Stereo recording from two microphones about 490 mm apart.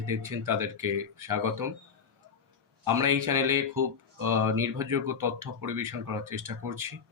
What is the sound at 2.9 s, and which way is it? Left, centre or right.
Speech, right.